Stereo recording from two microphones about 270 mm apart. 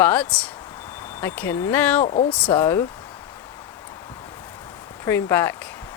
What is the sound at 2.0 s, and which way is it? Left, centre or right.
Speech, left.